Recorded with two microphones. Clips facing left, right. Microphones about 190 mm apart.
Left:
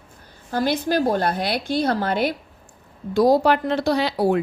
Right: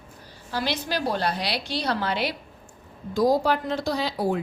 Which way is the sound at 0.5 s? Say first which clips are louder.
Left 7 dB; 50° left (ahead or behind).